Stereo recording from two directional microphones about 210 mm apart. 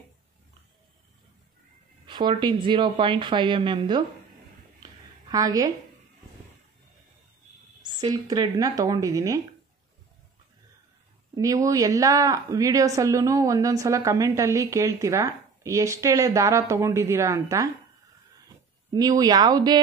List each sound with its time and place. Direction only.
2.0 s speech: 20° right (ahead or behind)
5.3 s a woman's voice: 15° right (ahead or behind)
7.8 s a woman's voice: 20° right (ahead or behind)
11.3 s a woman's voice: 15° right (ahead or behind)
18.9 s speech: 20° right (ahead or behind)